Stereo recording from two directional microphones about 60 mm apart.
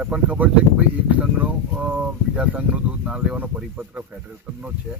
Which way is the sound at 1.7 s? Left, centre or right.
Centre.